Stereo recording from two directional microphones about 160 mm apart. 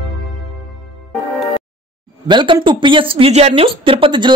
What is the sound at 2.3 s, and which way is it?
Speech, 30° right (ahead or behind).